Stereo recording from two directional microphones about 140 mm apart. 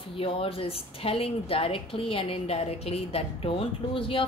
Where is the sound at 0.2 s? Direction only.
40° left (ahead or behind).